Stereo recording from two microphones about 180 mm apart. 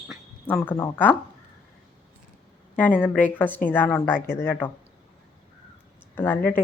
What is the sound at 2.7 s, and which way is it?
A woman's voice, 10° left (ahead or behind).